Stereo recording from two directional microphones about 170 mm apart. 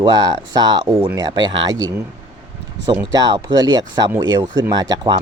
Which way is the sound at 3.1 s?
20° right (ahead or behind).